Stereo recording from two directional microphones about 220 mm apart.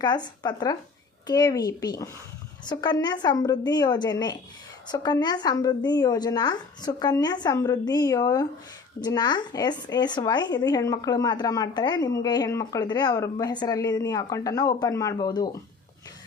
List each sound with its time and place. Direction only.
0.0 s a woman's voice: 20° left (ahead or behind)